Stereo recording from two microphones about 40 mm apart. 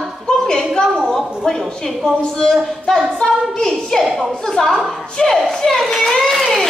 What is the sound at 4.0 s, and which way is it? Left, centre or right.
Speech, centre.